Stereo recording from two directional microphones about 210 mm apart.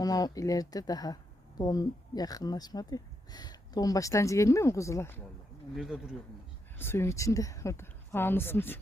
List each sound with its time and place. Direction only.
0.0 s speech: 15° left (ahead or behind)
5.7 s speech: centre (ahead or behind)
6.7 s speech: 10° left (ahead or behind)